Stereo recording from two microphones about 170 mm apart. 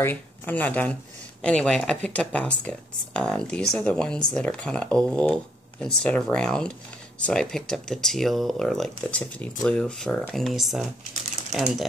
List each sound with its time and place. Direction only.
0.0 s speech: 10° left (ahead or behind)